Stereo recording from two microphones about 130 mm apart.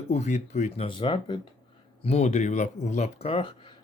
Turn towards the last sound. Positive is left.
turn(degrees=40)  # may be behind; listen again after turning